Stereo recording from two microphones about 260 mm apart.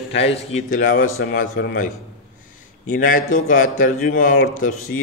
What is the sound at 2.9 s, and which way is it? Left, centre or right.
Speech, left.